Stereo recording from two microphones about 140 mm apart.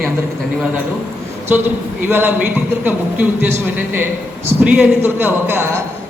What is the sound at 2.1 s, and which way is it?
A man's voice, 15° right (ahead or behind).